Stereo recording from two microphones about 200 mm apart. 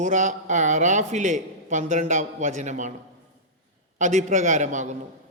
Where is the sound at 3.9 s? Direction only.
40° right (ahead or behind).